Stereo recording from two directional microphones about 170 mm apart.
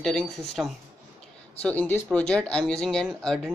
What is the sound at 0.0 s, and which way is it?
A woman's voice, 5° left (ahead or behind).